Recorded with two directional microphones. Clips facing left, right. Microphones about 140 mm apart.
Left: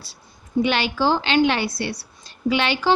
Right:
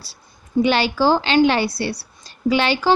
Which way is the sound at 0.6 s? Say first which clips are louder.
Right 4 dB; 35° right (ahead or behind).